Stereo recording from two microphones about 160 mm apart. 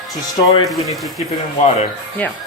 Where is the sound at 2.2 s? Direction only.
10° left (ahead or behind).